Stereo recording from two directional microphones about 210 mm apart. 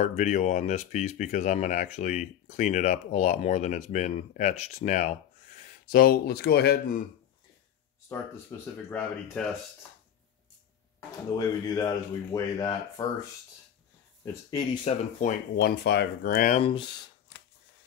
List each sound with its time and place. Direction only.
0.0 s speech: 35° left (ahead or behind)
8.1 s speech: 10° left (ahead or behind)
11.0 s speech: 20° left (ahead or behind)
14.2 s speech: 15° left (ahead or behind)
14.9 s speech: 35° left (ahead or behind)
15.6 s speech: 50° left (ahead or behind)
16.5 s speech: 25° left (ahead or behind)